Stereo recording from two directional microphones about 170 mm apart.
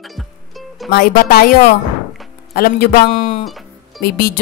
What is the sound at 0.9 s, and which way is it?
Speech, 55° left (ahead or behind).